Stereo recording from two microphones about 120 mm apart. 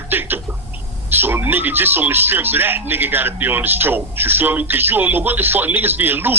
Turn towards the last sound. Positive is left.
turn(degrees=-15)  # may be behind; listen again after turning